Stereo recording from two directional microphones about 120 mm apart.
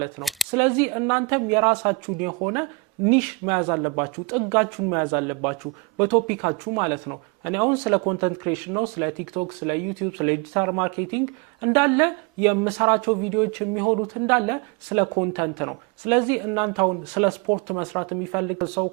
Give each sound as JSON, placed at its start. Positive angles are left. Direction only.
{"t": 0.2, "sound": "speech", "side_deg": 0}
{"t": 0.5, "sound": "speech", "side_deg": -15}